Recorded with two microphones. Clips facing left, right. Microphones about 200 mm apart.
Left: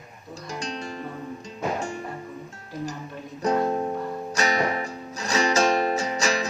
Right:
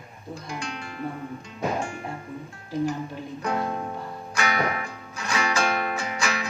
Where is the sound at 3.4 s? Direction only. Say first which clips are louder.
Left 6 dB; 35° left (ahead or behind).